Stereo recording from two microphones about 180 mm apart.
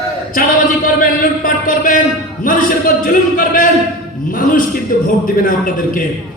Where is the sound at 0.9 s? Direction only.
50° left (ahead or behind).